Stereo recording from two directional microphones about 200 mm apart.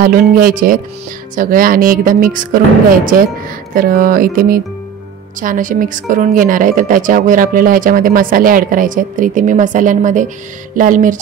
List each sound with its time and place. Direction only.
0.0 s speech: 45° right (ahead or behind)
3.7 s speech: 45° right (ahead or behind)